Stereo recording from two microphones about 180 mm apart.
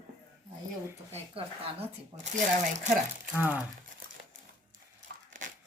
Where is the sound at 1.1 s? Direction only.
30° right (ahead or behind).